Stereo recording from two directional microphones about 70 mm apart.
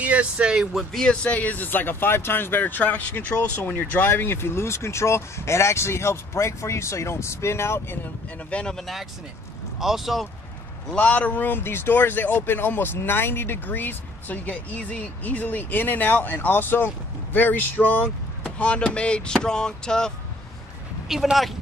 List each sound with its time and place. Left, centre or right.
0.0 s speech: centre
0.9 s speech: centre; by 8.0 s left
8.5 s speech: centre
8.7 s speech: centre
10.9 s speech: centre
21.1 s speech: centre